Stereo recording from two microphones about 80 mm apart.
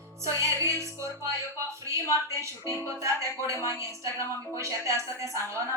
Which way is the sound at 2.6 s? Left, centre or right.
Right.